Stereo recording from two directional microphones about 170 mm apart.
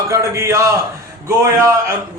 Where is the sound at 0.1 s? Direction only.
15° right (ahead or behind).